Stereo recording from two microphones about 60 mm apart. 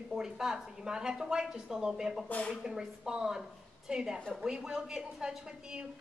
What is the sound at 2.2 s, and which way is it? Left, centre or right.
Speech, left.